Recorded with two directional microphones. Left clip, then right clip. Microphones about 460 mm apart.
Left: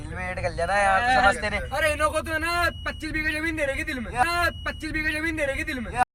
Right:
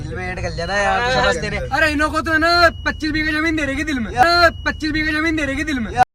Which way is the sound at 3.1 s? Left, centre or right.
Right.